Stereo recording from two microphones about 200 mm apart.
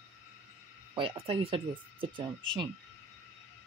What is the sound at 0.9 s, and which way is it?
Speech, 25° right (ahead or behind).